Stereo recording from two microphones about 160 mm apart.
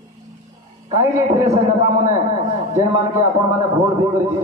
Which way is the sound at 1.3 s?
45° right (ahead or behind).